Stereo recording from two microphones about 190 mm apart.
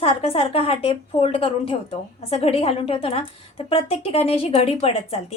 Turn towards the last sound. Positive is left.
turn(degrees=30)  # may be behind; listen again after turning